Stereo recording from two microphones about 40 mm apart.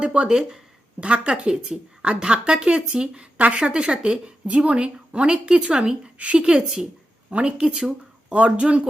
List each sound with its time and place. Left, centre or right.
0.0 s speech: right
0.3 s speech: centre
1.0 s speech: right
3.3 s speech: right
3.6 s speech: right
6.4 s speech: centre